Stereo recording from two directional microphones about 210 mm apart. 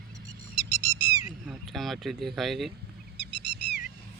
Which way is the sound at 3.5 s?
55° left (ahead or behind).